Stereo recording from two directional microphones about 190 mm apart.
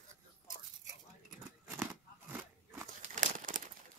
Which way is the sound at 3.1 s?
40° right (ahead or behind).